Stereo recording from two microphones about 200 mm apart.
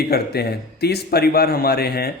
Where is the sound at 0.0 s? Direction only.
50° left (ahead or behind).